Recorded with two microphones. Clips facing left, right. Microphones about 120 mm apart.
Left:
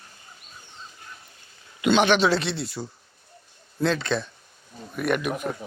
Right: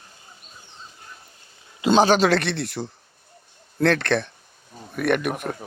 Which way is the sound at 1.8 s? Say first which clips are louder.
Right 2 dB; 35° right (ahead or behind).